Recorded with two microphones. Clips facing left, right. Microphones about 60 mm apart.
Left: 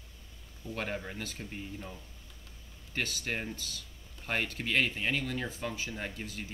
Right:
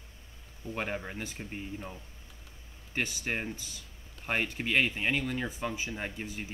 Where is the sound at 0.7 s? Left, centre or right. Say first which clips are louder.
Right 2 dB; centre.